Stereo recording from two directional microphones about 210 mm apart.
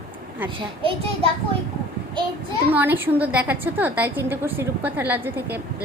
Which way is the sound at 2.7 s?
10° right (ahead or behind).